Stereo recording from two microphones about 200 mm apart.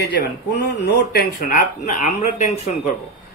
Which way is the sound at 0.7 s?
55° left (ahead or behind).